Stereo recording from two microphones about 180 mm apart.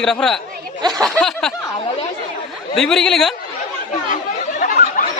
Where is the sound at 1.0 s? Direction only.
5° left (ahead or behind).